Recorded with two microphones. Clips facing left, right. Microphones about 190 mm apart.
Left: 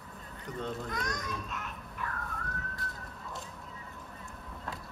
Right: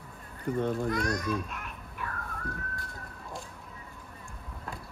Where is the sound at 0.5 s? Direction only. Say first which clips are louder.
Right 8 dB; 50° right (ahead or behind).